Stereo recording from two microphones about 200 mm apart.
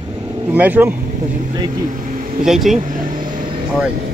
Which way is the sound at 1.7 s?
40° right (ahead or behind).